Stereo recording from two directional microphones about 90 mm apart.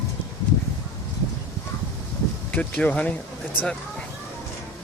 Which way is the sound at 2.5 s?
15° left (ahead or behind).